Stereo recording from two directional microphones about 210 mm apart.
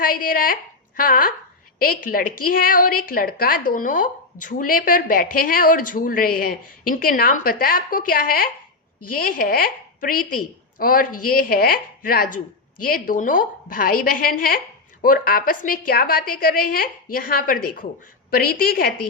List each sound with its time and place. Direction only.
0.0 s a woman's voice: 40° left (ahead or behind)